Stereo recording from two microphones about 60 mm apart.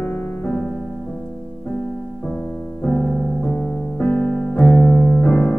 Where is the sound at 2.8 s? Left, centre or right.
Centre.